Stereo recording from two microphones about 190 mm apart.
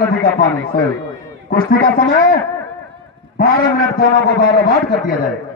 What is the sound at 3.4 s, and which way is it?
A man's voice, 50° left (ahead or behind).